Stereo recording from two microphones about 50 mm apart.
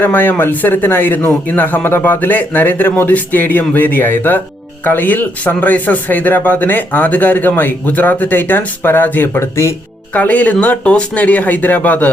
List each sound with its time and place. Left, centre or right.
0.0 s speech: left
9.4 s speech: left
10.1 s speech: left